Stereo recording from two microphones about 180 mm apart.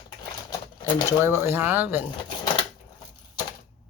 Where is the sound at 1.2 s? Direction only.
15° right (ahead or behind).